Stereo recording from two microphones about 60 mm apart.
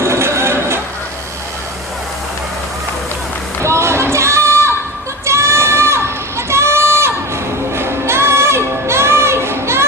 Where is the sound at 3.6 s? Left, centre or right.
Right.